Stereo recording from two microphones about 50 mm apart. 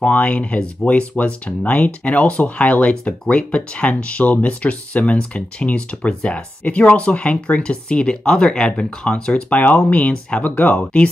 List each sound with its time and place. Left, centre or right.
0.0 s speech: left
9.5 s speech: left